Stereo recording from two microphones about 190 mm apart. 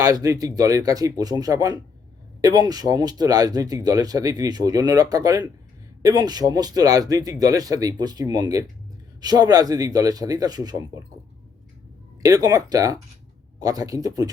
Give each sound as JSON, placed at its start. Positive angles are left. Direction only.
{"t": 0.0, "sound": "speech", "side_deg": -20}
{"t": 12.2, "sound": "speech", "side_deg": -20}